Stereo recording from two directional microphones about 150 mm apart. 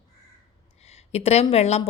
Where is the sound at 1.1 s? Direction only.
45° left (ahead or behind).